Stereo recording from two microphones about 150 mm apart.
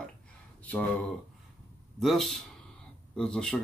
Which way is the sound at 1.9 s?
Centre (ahead or behind).